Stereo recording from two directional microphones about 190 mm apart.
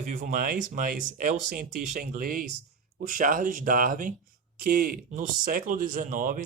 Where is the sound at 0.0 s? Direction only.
45° right (ahead or behind).